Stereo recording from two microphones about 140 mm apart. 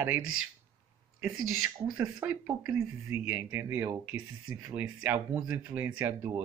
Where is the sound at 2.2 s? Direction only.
15° right (ahead or behind).